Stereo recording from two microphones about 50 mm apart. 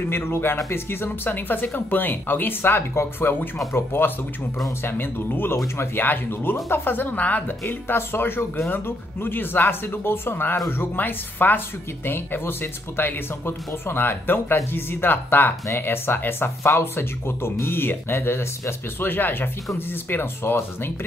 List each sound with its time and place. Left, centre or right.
0.1 s speech: left
7.9 s speech: left